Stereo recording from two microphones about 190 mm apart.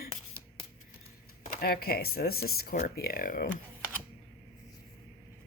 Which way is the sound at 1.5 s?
55° left (ahead or behind).